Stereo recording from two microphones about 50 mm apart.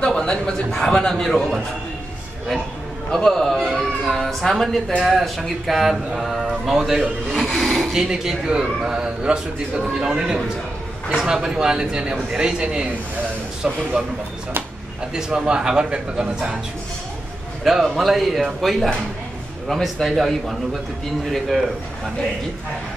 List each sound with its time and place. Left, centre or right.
0.0 s speech: centre
3.1 s speech: centre
4.0 s a sound: centre
5.0 s a man's voice: centre
7.4 s a man's voice: centre
15.1 s a man's voice: centre
17.6 s a man's voice: centre